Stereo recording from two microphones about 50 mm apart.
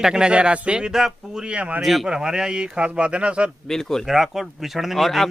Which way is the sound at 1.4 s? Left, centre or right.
Right.